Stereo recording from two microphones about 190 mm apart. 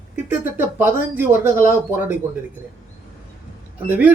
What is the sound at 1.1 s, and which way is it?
Speech, 10° right (ahead or behind).